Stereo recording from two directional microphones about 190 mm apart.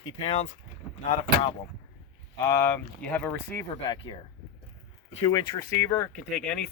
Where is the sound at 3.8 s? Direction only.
30° left (ahead or behind).